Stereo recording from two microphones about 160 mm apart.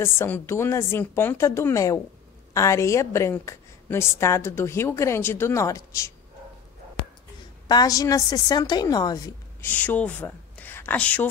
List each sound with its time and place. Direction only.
0.0 s a woman's voice: 15° left (ahead or behind)
7.6 s a woman's voice: 25° left (ahead or behind)
9.7 s speech: 10° left (ahead or behind)